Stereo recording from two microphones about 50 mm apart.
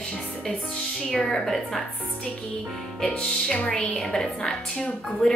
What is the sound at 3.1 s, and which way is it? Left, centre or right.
Speech, centre.